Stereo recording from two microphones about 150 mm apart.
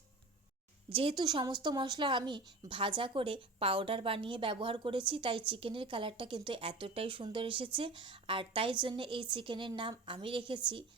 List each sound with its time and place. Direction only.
0.9 s a woman's voice: 35° right (ahead or behind)